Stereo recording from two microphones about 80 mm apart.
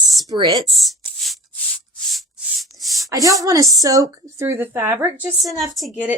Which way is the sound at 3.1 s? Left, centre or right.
Right.